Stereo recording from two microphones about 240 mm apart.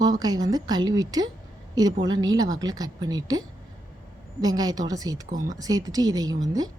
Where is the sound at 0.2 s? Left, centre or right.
Centre.